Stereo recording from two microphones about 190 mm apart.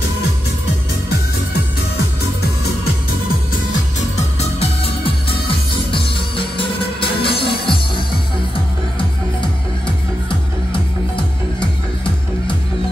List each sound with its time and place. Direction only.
4.4 s music: 30° left (ahead or behind)